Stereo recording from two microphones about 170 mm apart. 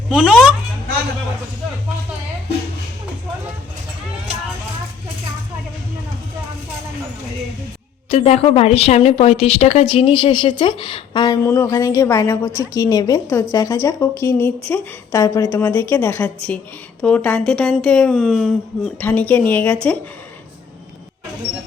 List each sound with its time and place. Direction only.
0.1 s speech: 5° right (ahead or behind)
8.1 s a woman's voice: 35° left (ahead or behind); by 18.5 s centre (ahead or behind)
18.9 s a woman's voice: 10° left (ahead or behind)